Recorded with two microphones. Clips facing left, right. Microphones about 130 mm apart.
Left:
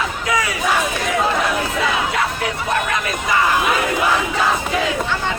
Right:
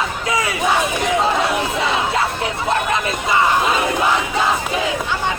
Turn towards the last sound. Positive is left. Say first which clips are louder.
# right 1 dB
turn(degrees=-25)  # may be behind; listen again after turning